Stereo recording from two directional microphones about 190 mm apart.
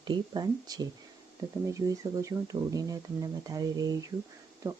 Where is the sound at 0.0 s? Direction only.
25° right (ahead or behind).